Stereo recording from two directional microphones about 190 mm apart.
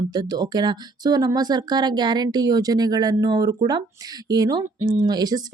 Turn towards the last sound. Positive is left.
turn(degrees=-20)  # may be behind; listen again after turning